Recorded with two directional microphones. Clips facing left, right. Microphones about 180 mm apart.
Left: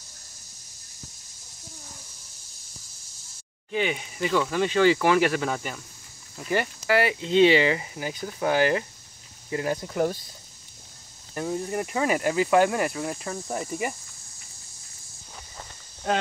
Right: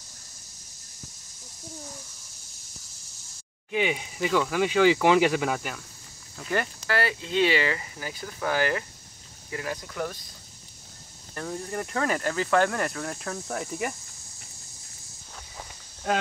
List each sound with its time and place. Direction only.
3.7 s speech: 10° right (ahead or behind)
6.3 s speech: 5° left (ahead or behind)
6.9 s speech: 15° left (ahead or behind)
11.3 s speech: 15° left (ahead or behind)
15.5 s walk: centre (ahead or behind)